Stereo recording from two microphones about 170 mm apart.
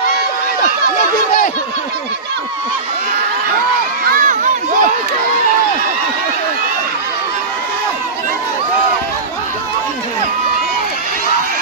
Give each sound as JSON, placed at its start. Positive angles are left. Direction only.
{"t": 4.1, "sound": "crowd", "side_deg": -50}